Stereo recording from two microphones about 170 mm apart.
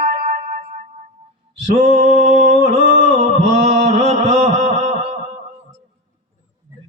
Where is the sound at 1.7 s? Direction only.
45° right (ahead or behind).